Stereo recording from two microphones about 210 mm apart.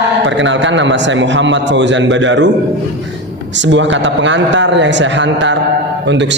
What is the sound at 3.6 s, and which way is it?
A man's voice, 60° right (ahead or behind).